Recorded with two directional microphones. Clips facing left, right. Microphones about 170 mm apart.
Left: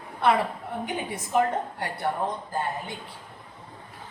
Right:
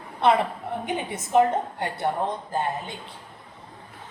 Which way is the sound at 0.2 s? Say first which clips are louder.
Right 2 dB; 25° right (ahead or behind).